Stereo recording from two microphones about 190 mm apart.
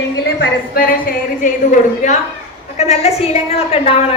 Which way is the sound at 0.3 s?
50° left (ahead or behind).